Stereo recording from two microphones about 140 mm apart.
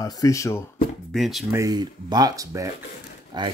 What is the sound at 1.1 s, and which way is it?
Speech, centre (ahead or behind).